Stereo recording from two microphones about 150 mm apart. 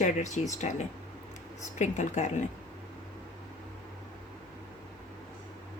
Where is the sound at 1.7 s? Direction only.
50° left (ahead or behind).